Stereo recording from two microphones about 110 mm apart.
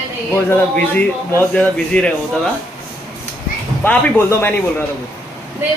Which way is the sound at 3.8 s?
15° left (ahead or behind).